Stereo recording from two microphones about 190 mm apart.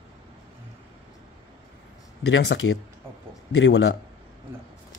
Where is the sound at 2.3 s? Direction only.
65° left (ahead or behind).